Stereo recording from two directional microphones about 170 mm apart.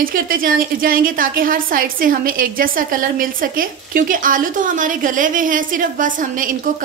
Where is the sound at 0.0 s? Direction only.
55° right (ahead or behind).